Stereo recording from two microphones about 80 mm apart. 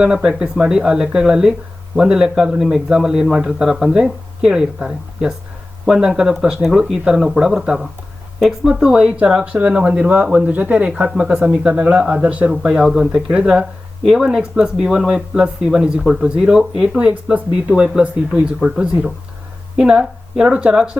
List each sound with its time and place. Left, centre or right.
0.0 s speech: centre
12.5 s speech: centre